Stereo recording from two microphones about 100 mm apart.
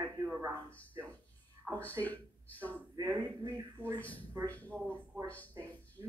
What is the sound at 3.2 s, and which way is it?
Speech, 50° right (ahead or behind).